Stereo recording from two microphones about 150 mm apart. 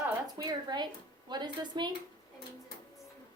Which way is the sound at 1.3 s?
30° right (ahead or behind).